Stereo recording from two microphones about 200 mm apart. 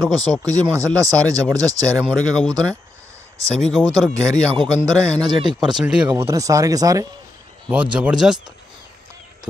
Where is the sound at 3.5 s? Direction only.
Centre (ahead or behind).